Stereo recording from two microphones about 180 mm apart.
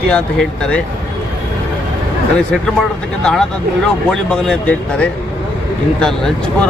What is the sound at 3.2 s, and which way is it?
Speech, 5° left (ahead or behind).